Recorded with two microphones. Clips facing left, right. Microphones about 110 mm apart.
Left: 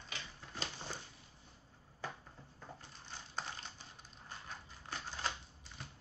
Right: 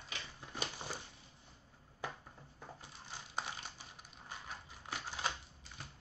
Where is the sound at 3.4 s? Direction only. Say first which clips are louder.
Right 2 dB; 10° right (ahead or behind).